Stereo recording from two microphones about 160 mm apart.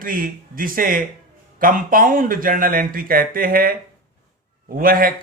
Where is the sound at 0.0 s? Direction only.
60° right (ahead or behind).